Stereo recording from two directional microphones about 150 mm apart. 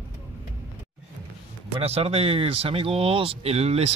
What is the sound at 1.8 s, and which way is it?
Speech, 45° right (ahead or behind).